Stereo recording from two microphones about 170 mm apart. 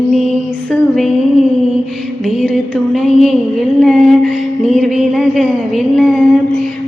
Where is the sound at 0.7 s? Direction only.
Centre (ahead or behind).